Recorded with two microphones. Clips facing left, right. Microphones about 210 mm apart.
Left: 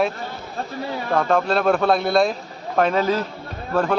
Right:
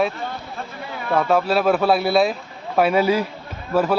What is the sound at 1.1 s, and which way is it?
Speech, 5° right (ahead or behind).